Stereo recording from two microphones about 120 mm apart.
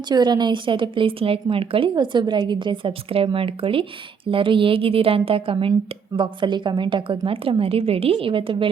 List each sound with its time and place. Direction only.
0.1 s a woman's voice: 35° right (ahead or behind)